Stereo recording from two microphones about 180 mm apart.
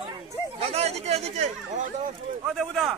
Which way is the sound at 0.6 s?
35° right (ahead or behind).